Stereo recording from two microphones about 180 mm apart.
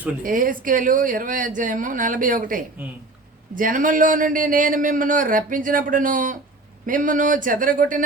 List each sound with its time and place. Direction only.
0.2 s a man's voice: 50° right (ahead or behind)